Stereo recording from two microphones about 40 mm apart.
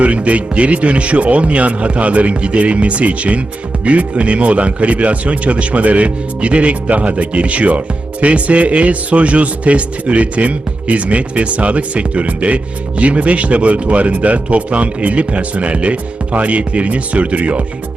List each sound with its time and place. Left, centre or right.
0.0 s speech: right